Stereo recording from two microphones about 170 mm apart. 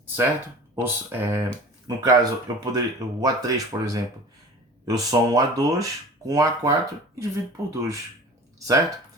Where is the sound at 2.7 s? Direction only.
20° right (ahead or behind).